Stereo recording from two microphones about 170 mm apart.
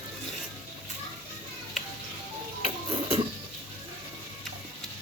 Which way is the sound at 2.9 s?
30° right (ahead or behind).